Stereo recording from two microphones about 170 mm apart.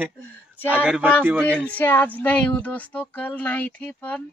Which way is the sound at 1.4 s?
5° left (ahead or behind).